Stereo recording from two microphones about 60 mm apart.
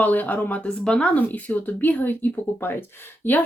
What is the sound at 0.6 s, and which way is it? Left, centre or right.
Speech, centre.